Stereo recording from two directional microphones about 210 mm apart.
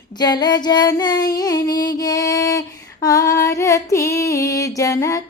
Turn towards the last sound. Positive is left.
turn(degrees=15)  # may be behind; listen again after turning